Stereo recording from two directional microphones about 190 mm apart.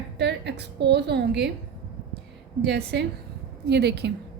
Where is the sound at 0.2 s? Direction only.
65° right (ahead or behind).